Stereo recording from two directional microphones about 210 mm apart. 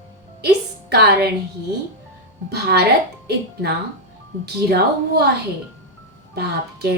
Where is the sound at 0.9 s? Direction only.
50° right (ahead or behind).